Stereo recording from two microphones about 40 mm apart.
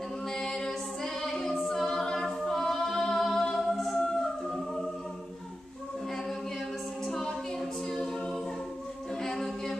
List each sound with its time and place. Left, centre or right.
0.4 s music: centre
1.7 s a capella: centre
3.5 s music: centre
3.9 s music: left
7.1 s music: centre
9.2 s a sound: centre